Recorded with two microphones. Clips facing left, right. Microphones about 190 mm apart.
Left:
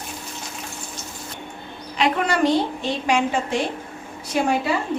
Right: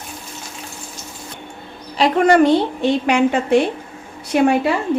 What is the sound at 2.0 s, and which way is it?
Speech, 35° right (ahead or behind).